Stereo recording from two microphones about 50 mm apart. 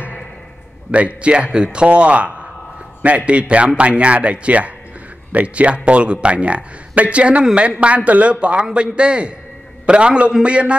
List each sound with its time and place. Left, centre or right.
0.9 s speech: right